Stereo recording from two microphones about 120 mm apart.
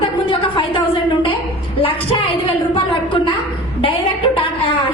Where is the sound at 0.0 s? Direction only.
50° left (ahead or behind).